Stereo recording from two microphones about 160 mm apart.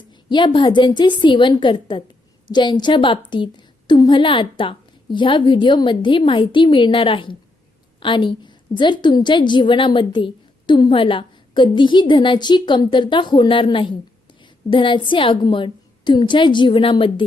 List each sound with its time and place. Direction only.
0.3 s a woman's voice: 30° left (ahead or behind)